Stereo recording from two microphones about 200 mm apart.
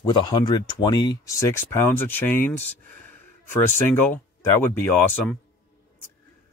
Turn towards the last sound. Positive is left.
turn(degrees=10)  # may be behind; listen again after turning